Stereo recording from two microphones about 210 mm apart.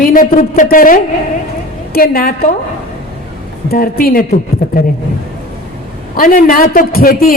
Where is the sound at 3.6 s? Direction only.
45° left (ahead or behind).